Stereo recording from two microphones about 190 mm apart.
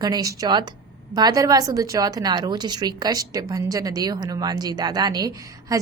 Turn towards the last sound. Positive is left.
turn(degrees=-15)  # may be behind; listen again after turning